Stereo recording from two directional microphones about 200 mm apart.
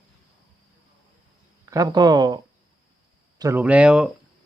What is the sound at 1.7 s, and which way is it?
Speech, 20° right (ahead or behind).